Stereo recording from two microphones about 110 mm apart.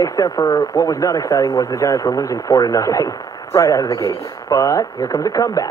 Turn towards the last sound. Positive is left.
turn(degrees=30)  # may be behind; listen again after turning